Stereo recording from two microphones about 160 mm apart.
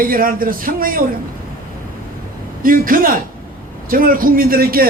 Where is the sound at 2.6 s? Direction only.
60° right (ahead or behind).